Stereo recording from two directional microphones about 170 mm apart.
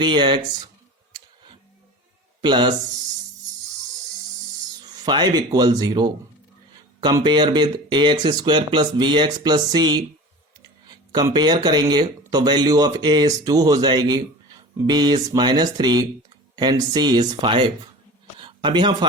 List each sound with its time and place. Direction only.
0.0 s speech: 30° right (ahead or behind)
2.4 s speech: 25° right (ahead or behind)
5.0 s speech: 25° right (ahead or behind)
18.3 s a sound: 30° right (ahead or behind)